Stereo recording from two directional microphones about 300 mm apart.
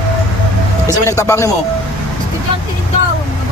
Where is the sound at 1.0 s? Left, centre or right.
Centre.